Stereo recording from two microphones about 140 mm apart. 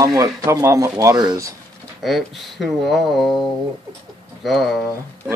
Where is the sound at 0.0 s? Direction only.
25° right (ahead or behind).